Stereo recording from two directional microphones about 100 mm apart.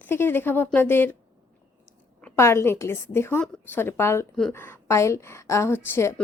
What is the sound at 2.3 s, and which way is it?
A woman's voice, 25° left (ahead or behind).